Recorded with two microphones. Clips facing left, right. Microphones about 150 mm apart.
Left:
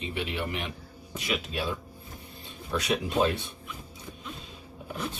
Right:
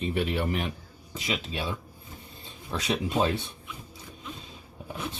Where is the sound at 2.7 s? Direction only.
25° right (ahead or behind).